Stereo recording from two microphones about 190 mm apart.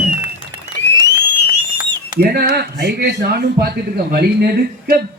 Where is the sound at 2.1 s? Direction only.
55° right (ahead or behind).